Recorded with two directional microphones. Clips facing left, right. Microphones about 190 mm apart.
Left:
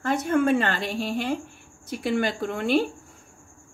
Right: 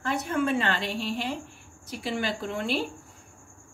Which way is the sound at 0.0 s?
45° left (ahead or behind).